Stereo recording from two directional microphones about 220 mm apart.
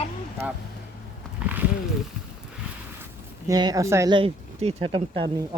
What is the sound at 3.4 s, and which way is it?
Speech, 15° right (ahead or behind).